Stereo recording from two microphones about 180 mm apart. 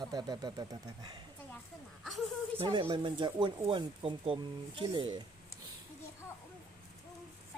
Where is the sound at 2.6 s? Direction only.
30° right (ahead or behind).